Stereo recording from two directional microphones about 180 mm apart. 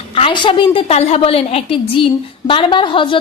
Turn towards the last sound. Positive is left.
turn(degrees=30)  # may be behind; listen again after turning